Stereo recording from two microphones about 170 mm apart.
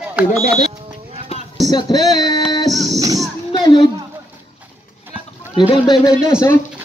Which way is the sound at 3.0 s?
20° right (ahead or behind).